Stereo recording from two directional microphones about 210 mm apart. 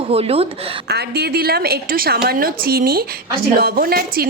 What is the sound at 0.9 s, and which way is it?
A woman's voice, 50° right (ahead or behind).